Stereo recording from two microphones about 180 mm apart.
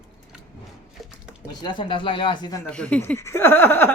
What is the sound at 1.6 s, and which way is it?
Speech, 25° left (ahead or behind).